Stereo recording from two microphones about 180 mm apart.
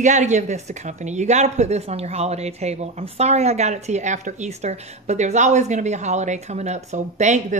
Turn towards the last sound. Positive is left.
turn(degrees=-40)  # may be behind; listen again after turning